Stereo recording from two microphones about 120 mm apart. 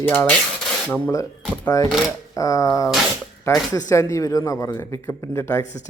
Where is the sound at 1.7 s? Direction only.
30° left (ahead or behind).